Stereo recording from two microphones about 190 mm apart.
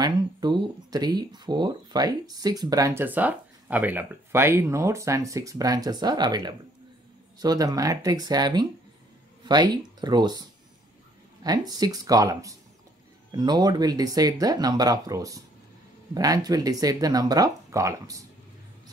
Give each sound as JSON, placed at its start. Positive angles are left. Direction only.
{"t": 0.0, "sound": "speech", "side_deg": -20}
{"t": 11.4, "sound": "speech", "side_deg": -20}